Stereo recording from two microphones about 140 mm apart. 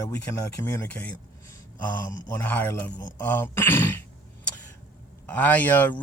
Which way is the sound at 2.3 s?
10° left (ahead or behind).